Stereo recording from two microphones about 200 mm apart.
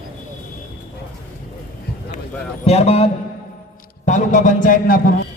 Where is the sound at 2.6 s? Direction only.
30° left (ahead or behind).